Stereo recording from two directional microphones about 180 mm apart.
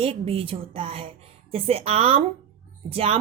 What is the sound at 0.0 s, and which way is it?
Speech, 30° right (ahead or behind).